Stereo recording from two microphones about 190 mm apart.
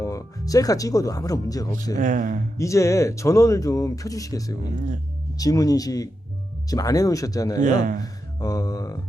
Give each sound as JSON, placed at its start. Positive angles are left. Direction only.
{"t": 0.0, "sound": "speech", "side_deg": 15}
{"t": 2.0, "sound": "speech", "side_deg": -45}
{"t": 2.6, "sound": "speech", "side_deg": 15}
{"t": 7.8, "sound": "speech", "side_deg": -45}
{"t": 8.0, "sound": "mantra", "side_deg": 20}